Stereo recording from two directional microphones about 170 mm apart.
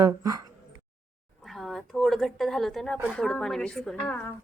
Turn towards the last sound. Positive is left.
turn(degrees=5)  # may be behind; listen again after turning